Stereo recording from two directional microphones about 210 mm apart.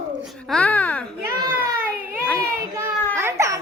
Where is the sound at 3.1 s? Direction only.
15° right (ahead or behind).